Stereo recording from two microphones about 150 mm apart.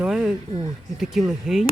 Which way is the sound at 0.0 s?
5° right (ahead or behind).